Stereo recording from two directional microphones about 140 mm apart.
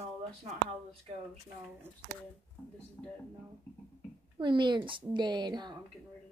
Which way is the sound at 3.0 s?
5° left (ahead or behind).